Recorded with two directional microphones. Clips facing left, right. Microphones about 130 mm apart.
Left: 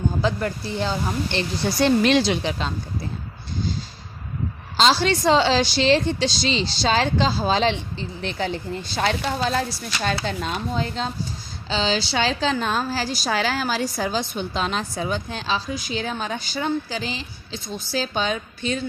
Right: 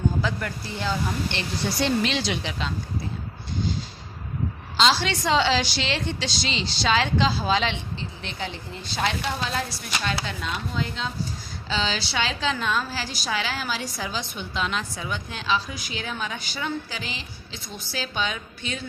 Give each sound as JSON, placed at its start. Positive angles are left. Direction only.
{"t": 0.2, "sound": "a woman's voice", "side_deg": 30}
{"t": 4.8, "sound": "a woman's voice", "side_deg": 40}